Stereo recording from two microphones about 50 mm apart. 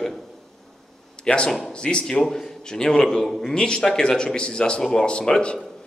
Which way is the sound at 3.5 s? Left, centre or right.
Centre.